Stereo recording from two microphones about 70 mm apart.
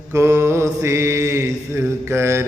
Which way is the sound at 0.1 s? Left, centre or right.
Right.